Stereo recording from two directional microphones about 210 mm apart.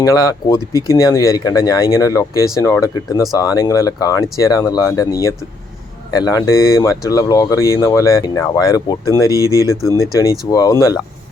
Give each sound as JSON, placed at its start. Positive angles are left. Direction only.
{"t": 0.0, "sound": "speech", "side_deg": 15}
{"t": 9.3, "sound": "speech", "side_deg": -15}
{"t": 10.0, "sound": "speech", "side_deg": 15}